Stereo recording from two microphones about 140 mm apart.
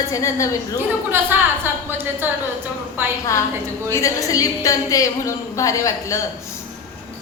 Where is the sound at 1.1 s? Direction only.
15° right (ahead or behind).